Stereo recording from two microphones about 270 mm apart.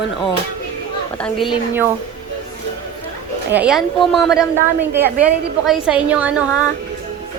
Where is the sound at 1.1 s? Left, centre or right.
Centre.